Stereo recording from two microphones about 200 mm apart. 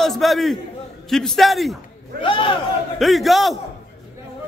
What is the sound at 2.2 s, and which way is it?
Speech, 25° left (ahead or behind).